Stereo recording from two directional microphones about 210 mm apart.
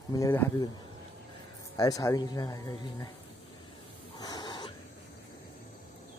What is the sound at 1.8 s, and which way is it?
Speech, 15° left (ahead or behind).